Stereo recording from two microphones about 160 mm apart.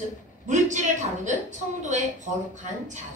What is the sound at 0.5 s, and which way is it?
A man's voice, 50° right (ahead or behind).